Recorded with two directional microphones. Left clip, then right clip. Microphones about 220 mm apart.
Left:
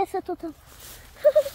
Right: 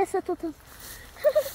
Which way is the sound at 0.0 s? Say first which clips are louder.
Even; 20° left (ahead or behind).